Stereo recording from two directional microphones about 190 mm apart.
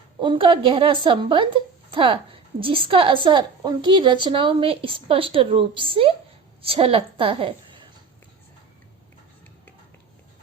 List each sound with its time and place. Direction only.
0.2 s a woman's voice: 25° right (ahead or behind)